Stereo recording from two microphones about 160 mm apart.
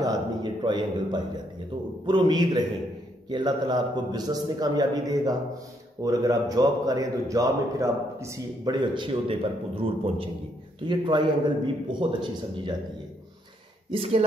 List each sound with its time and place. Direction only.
0.0 s a man's voice: 25° right (ahead or behind)
13.9 s speech: 40° right (ahead or behind)